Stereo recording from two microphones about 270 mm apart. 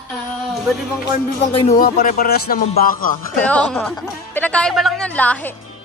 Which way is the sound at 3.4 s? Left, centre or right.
Centre.